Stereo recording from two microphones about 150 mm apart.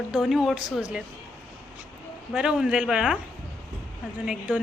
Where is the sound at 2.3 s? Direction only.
5° right (ahead or behind).